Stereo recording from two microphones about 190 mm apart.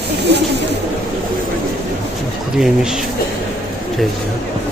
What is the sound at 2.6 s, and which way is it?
Speech, 5° right (ahead or behind).